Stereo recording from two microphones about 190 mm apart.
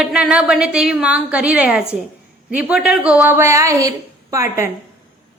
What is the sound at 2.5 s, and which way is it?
A woman's voice, 5° right (ahead or behind).